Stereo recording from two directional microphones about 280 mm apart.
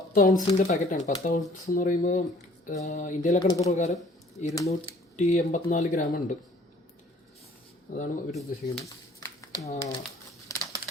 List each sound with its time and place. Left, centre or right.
0.1 s speech: left
4.5 s speech: centre
5.1 s speech: left
7.9 s speech: left
9.2 s a sound: centre
9.7 s speech: centre
10.5 s a sound: centre